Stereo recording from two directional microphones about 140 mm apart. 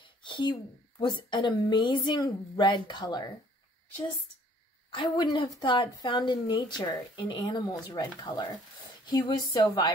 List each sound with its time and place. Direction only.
0.0 s a woman's voice: 35° left (ahead or behind)
4.9 s a woman's voice: 35° left (ahead or behind)